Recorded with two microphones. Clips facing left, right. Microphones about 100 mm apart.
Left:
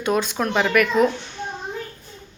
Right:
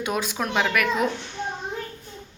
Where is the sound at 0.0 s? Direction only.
5° right (ahead or behind).